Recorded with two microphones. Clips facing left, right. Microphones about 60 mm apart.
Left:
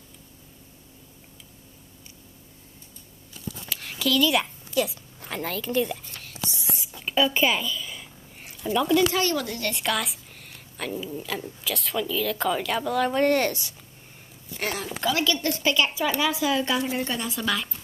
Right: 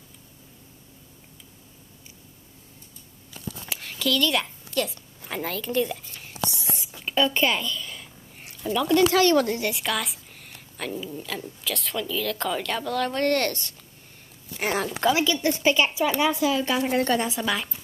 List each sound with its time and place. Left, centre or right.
3.9 s a woman's voice: centre
6.8 s a sound: centre
9.1 s speech: right
9.7 s speech: centre
14.6 s a woman's voice: centre; by 16.8 s right
16.9 s a woman's voice: right
17.3 s speech: centre